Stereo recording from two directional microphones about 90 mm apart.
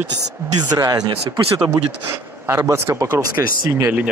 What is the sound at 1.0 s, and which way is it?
Speech, 65° right (ahead or behind).